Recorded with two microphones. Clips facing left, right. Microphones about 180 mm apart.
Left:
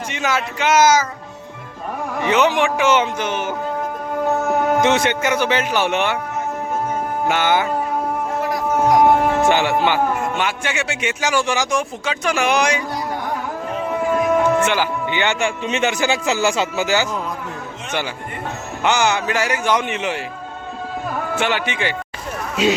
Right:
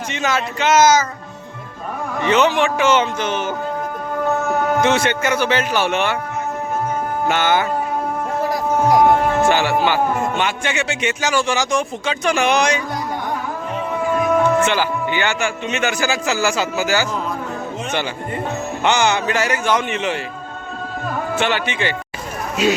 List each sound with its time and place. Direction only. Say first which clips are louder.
0.1 s speech: right 1 dB; 10° left (ahead or behind)
2.2 s a man's voice: right 1 dB; 15° left (ahead or behind)
7.3 s speech: even; 15° left (ahead or behind)
9.5 s speech: even; 20° left (ahead or behind)
10.3 s speech: right 1 dB; 5° left (ahead or behind)
14.4 s speech: right 1 dB; 15° left (ahead or behind)
18.8 s speech: even; 5° left (ahead or behind)
21.3 s speech: right 1 dB; 10° left (ahead or behind)
22.6 s speech: even; 30° left (ahead or behind)